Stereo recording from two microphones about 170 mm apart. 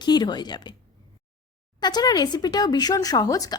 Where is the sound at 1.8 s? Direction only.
25° left (ahead or behind).